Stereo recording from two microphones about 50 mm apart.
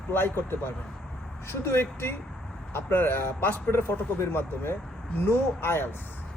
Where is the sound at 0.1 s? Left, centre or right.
Left.